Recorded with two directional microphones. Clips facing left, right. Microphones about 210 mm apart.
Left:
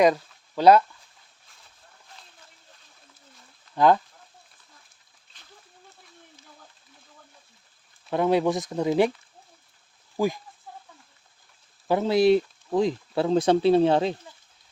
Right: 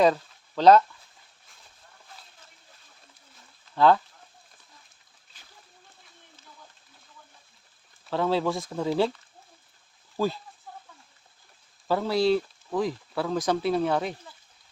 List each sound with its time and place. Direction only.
0.0 s speech: 10° left (ahead or behind)
3.8 s speech: 15° left (ahead or behind)
8.1 s speech: 15° left (ahead or behind)
10.2 s speech: 15° left (ahead or behind)
11.9 s speech: 20° left (ahead or behind)